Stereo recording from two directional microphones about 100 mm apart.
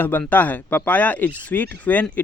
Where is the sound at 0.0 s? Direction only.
20° left (ahead or behind).